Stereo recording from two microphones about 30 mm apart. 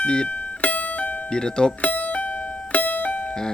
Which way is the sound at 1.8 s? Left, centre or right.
Left.